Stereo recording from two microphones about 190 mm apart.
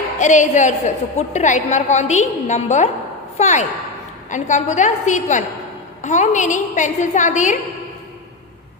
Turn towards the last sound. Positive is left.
turn(degrees=40)  # may be behind; listen again after turning